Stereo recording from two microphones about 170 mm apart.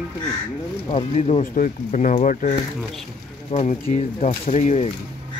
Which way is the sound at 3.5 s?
35° left (ahead or behind).